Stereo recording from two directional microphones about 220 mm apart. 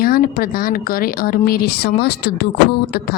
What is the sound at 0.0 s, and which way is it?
A woman's voice, 40° left (ahead or behind).